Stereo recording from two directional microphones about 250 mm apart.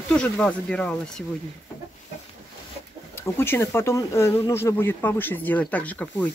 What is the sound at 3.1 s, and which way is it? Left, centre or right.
Speech, centre.